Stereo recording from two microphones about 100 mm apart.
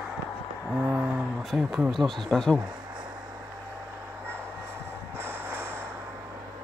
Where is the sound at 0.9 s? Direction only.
10° right (ahead or behind).